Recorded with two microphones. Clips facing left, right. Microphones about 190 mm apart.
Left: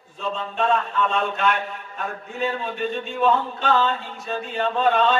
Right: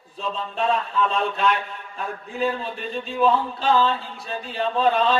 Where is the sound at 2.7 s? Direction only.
35° right (ahead or behind).